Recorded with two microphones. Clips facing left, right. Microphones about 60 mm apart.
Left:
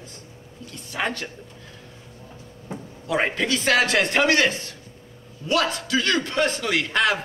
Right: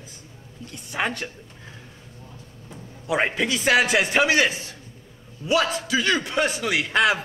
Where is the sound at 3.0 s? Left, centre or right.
Centre.